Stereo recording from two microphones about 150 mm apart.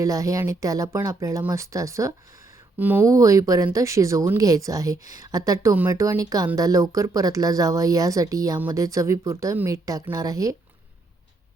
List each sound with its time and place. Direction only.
0.0 s speech: 20° right (ahead or behind)